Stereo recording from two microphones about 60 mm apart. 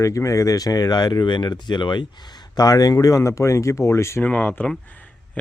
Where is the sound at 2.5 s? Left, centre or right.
Left.